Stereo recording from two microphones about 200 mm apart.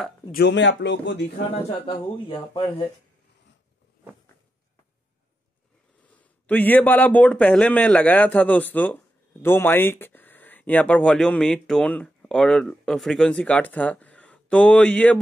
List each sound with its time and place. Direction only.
0.3 s speech: 55° left (ahead or behind)
1.7 s a man's voice: 25° left (ahead or behind)
6.4 s a man's voice: 10° left (ahead or behind)